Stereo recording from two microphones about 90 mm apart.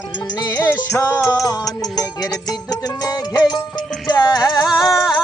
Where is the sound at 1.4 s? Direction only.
40° left (ahead or behind).